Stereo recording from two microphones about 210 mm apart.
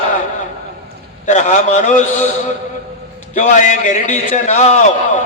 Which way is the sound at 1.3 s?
35° left (ahead or behind).